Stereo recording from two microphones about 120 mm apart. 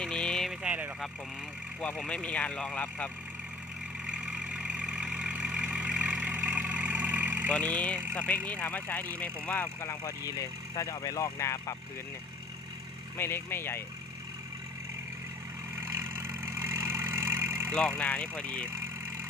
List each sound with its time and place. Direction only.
0.0 s vehicle: 5° left (ahead or behind)
0.6 s vehicle: 15° right (ahead or behind)
2.0 s speech: 10° left (ahead or behind)
4.0 s vehicle: 10° right (ahead or behind)
7.5 s speech: 10° left (ahead or behind); by 11.8 s 25° left (ahead or behind)
13.1 s speech: 20° left (ahead or behind)
15.7 s vehicle: 25° right (ahead or behind)
17.7 s speech: 10° left (ahead or behind)